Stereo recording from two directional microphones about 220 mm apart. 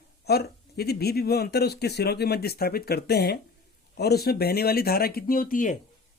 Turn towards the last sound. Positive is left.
turn(degrees=35)  # may be behind; listen again after turning